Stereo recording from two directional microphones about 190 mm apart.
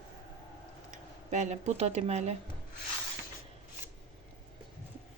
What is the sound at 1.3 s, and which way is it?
Speech, 40° right (ahead or behind).